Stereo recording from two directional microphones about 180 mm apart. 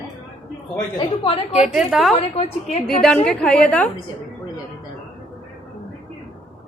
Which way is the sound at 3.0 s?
5° left (ahead or behind).